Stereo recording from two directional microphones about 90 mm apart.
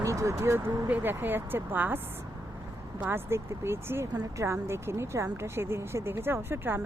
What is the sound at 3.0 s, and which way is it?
Speech, 25° right (ahead or behind).